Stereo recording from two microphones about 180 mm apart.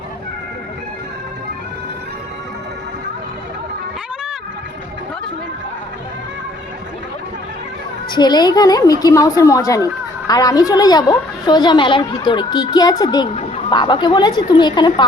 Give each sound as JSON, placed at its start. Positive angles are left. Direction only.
{"t": 8.1, "sound": "a woman's voice", "side_deg": 25}